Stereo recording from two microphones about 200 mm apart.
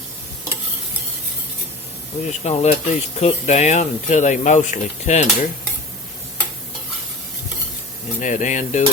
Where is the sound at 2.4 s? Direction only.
35° left (ahead or behind).